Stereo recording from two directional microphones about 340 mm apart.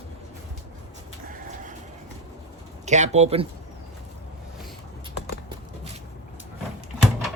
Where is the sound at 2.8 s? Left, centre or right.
Right.